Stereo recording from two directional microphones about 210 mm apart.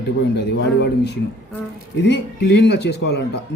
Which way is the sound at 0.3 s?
55° left (ahead or behind).